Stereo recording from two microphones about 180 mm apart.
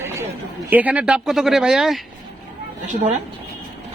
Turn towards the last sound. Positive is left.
turn(degrees=-40)  # may be behind; listen again after turning